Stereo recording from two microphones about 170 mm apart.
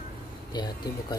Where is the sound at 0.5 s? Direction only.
25° left (ahead or behind).